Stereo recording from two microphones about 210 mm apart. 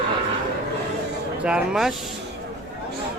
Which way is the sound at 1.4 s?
5° right (ahead or behind).